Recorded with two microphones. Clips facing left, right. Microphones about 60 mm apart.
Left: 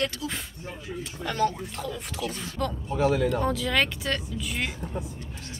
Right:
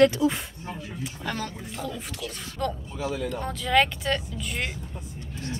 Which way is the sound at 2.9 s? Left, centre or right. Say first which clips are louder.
Left 6 dB; left.